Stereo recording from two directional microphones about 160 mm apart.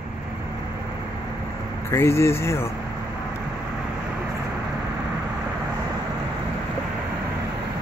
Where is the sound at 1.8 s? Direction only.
15° left (ahead or behind).